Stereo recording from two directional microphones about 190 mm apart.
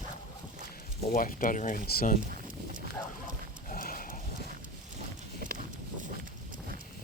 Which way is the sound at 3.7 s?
45° left (ahead or behind).